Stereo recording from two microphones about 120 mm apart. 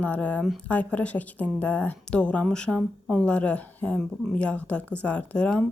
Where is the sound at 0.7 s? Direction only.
10° left (ahead or behind).